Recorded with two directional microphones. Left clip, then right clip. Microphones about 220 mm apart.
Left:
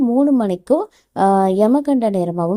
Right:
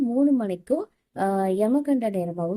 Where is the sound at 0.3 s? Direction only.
30° left (ahead or behind).